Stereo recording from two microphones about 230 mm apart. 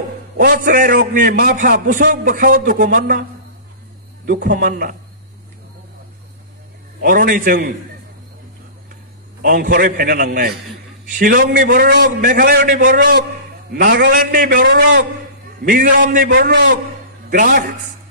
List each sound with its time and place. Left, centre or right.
0.4 s a man's voice: right
4.3 s a man's voice: right
7.0 s a man's voice: right
9.4 s a man's voice: right